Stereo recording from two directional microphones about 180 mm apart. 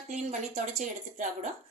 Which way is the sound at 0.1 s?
40° right (ahead or behind).